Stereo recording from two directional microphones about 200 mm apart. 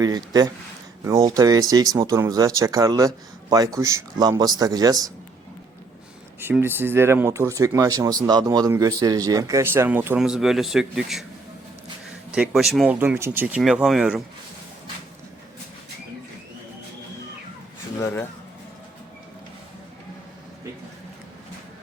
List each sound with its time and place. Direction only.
0.0 s a man's voice: 20° right (ahead or behind)
6.4 s speech: 10° right (ahead or behind)
12.3 s speech: 5° right (ahead or behind)
18.0 s a sound: 10° left (ahead or behind)